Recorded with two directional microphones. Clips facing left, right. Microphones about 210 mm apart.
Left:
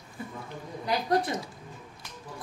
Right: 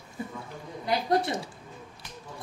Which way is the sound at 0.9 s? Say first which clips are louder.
Right 1 dB; 25° right (ahead or behind).